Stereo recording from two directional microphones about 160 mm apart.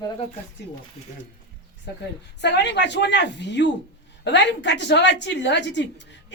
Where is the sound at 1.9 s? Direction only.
90° left.